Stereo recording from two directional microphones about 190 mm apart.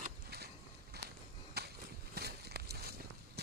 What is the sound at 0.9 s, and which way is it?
Walk, 60° right (ahead or behind).